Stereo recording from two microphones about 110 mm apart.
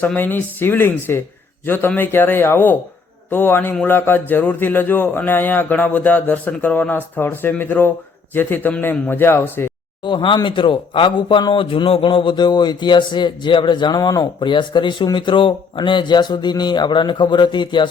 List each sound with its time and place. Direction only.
0.0 s a man's voice: 15° left (ahead or behind)
10.0 s a man's voice: 45° left (ahead or behind)